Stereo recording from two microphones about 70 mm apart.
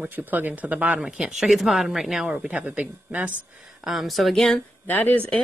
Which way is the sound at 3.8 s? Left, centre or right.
Centre.